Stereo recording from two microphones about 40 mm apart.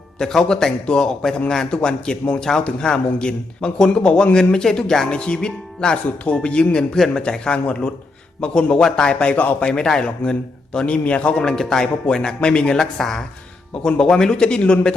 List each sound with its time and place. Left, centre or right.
0.2 s a man's voice: centre
4.4 s a man's voice: centre
6.7 s a man's voice: centre
8.7 s a man's voice: centre
9.1 s speech: left
9.6 s a man's voice: left
12.8 s a man's voice: centre